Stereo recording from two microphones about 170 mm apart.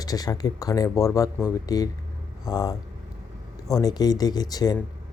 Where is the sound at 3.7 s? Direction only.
25° left (ahead or behind).